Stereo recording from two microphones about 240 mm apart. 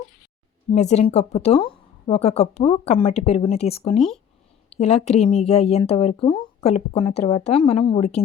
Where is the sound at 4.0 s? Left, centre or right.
Centre.